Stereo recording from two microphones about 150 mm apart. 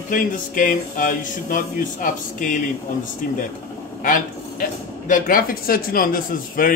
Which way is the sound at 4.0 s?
65° left (ahead or behind).